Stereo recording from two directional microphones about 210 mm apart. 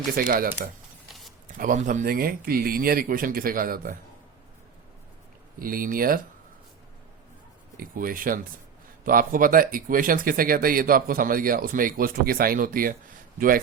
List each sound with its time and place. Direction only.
0.2 s speech: 45° right (ahead or behind)
5.5 s speech: 40° right (ahead or behind)
7.8 s speech: 40° right (ahead or behind)